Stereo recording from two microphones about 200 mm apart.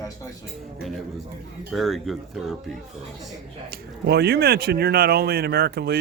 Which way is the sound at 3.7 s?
55° right (ahead or behind).